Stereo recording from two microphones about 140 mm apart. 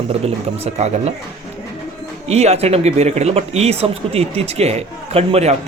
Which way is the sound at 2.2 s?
50° right (ahead or behind).